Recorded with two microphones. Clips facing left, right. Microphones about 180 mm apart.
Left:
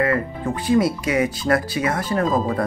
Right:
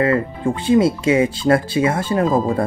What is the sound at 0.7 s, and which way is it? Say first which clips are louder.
Speech: right 4 dB; 25° right (ahead or behind).